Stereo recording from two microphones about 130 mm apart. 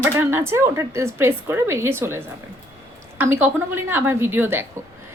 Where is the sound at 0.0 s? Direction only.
20° right (ahead or behind).